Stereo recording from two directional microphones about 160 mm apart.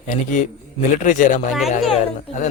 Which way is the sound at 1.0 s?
50° left (ahead or behind).